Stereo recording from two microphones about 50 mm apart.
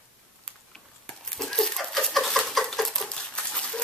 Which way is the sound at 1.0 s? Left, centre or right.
Centre.